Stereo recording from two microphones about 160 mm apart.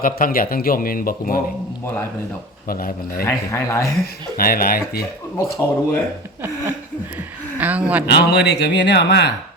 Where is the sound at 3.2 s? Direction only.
15° left (ahead or behind).